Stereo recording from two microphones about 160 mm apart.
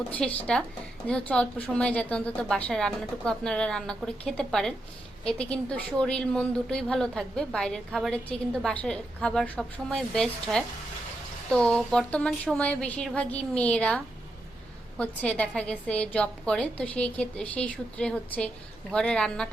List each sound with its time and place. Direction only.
0.1 s a woman's voice: 10° left (ahead or behind)